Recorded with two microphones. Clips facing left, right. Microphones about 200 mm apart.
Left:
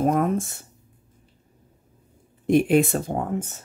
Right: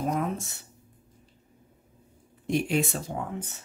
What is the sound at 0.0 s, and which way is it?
Speech, 50° left (ahead or behind).